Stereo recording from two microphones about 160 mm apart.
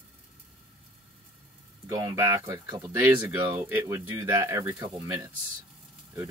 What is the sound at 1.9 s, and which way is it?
Speech, 20° right (ahead or behind).